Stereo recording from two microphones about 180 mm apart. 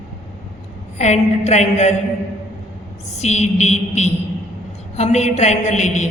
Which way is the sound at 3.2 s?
40° left (ahead or behind).